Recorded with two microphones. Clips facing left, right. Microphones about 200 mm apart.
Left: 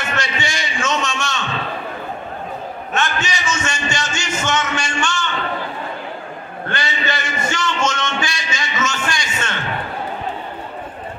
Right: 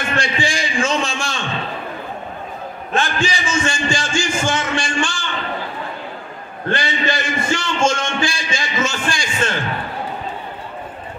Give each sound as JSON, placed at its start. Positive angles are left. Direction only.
{"t": 0.1, "sound": "a man's voice", "side_deg": -30}
{"t": 2.9, "sound": "a man's voice", "side_deg": -30}
{"t": 6.7, "sound": "a man's voice", "side_deg": -30}